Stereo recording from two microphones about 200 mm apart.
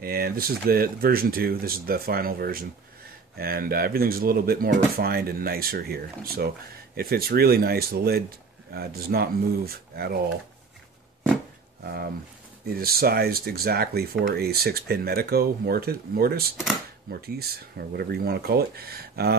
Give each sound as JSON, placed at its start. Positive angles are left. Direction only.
{"t": 0.0, "sound": "speech", "side_deg": -50}
{"t": 11.8, "sound": "speech", "side_deg": -50}